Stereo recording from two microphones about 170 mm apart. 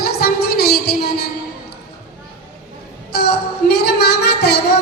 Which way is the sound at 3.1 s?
70° left (ahead or behind).